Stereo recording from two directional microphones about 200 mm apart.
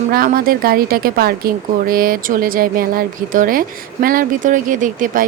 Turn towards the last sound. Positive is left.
turn(degrees=-40)  # may be behind; listen again after turning